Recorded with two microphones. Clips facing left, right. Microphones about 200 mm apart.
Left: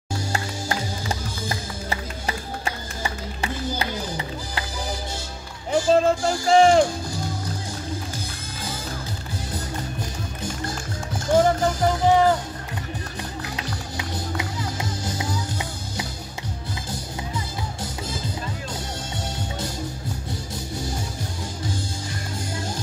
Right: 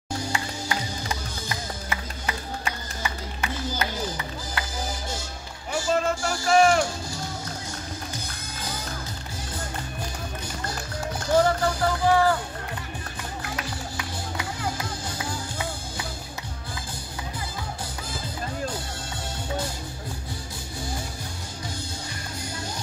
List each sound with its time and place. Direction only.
0.3 s music: 40° left (ahead or behind)
5.7 s speech: 30° left (ahead or behind)
11.3 s music: 20° left (ahead or behind)
13.6 s music: 25° left (ahead or behind)